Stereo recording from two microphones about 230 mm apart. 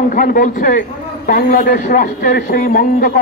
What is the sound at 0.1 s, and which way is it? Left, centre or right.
A man's voice, left.